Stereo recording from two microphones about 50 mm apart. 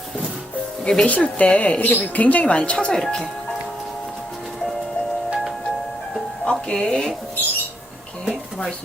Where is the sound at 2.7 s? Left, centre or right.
Centre.